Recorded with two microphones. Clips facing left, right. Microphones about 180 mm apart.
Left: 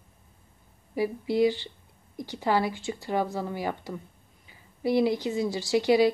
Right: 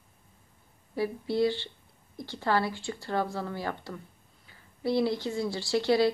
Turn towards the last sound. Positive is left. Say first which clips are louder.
# left 3 dB
turn(degrees=15)  # may be behind; listen again after turning